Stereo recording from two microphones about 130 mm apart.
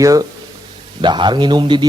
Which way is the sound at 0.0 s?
25° right (ahead or behind).